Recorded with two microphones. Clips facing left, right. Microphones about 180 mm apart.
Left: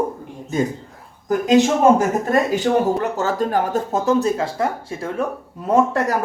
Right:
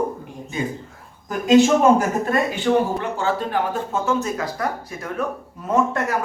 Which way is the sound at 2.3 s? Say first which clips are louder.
Left 1 dB; 40° left (ahead or behind).